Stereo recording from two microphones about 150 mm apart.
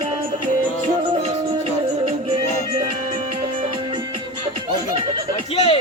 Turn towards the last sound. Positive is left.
turn(degrees=40)  # may be behind; listen again after turning